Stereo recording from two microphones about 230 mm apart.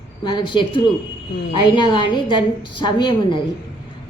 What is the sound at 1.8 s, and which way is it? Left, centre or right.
A woman's voice, left.